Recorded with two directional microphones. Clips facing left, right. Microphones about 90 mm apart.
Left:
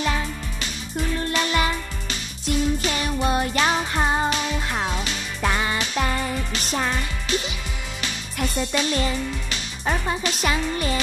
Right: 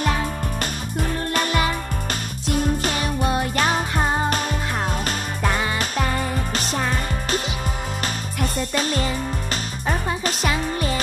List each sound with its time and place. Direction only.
1.3 s music: 50° right (ahead or behind)
8.5 s music: 45° right (ahead or behind)